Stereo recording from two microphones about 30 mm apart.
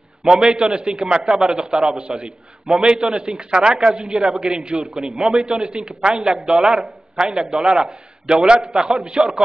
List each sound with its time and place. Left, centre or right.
0.2 s a man's voice: right
1.3 s a man's voice: centre
1.6 s a man's voice: right
5.5 s a man's voice: right